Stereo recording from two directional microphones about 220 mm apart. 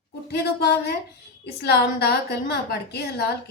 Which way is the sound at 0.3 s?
50° left (ahead or behind).